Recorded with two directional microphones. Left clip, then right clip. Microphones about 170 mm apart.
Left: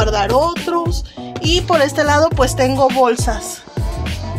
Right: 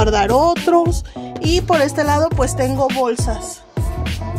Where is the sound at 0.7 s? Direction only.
70° right (ahead or behind).